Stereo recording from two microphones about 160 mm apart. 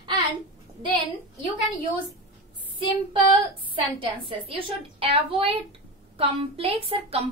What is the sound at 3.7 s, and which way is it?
A woman's voice, 30° right (ahead or behind).